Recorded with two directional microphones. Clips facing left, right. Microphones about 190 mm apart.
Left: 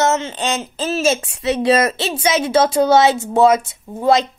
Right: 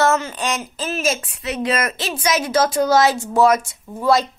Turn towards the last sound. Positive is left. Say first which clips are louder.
# left 2 dB
turn(degrees=20)  # may be behind; listen again after turning